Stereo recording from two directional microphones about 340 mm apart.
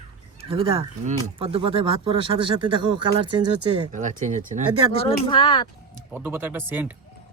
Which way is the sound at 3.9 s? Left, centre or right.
Right.